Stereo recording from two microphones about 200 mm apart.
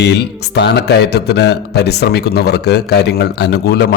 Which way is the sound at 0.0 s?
55° left (ahead or behind).